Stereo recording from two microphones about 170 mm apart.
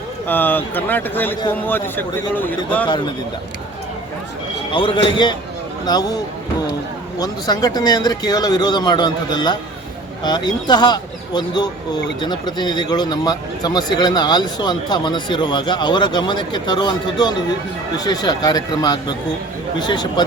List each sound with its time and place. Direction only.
0.3 s a man's voice: 10° left (ahead or behind)
4.7 s speech: 30° left (ahead or behind)
7.2 s speech: 20° left (ahead or behind)